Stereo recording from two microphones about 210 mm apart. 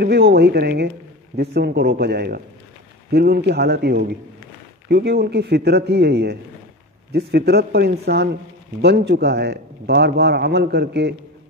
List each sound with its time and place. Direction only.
0.0 s speech: 50° right (ahead or behind)